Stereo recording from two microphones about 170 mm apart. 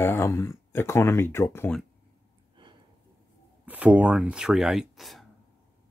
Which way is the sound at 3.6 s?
10° right (ahead or behind).